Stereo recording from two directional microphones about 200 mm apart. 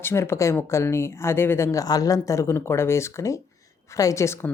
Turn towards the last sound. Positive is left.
turn(degrees=15)  # may be behind; listen again after turning